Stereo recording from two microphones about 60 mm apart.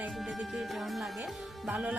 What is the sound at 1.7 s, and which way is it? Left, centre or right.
Speech, centre.